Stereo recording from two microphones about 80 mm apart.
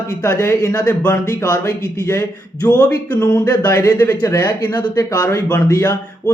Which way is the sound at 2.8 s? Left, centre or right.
Left.